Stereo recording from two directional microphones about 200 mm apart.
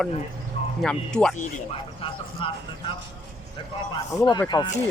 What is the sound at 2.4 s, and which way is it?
Speech, 25° left (ahead or behind).